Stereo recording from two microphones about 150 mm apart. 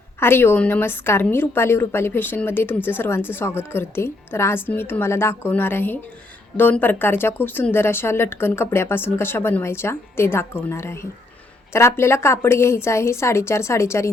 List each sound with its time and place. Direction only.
0.2 s a woman's voice: 15° left (ahead or behind)